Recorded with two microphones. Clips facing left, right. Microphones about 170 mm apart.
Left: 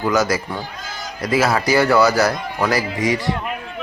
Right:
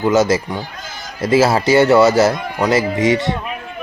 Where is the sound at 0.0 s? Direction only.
25° right (ahead or behind).